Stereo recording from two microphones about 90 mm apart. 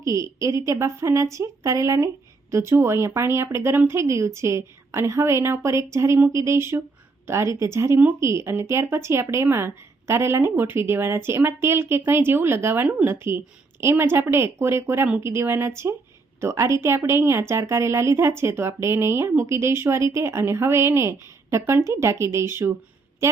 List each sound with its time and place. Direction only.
0.0 s a woman's voice: 35° right (ahead or behind)